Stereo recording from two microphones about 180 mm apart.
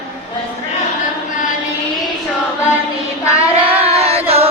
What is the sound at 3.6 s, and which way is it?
Child singing, 35° right (ahead or behind).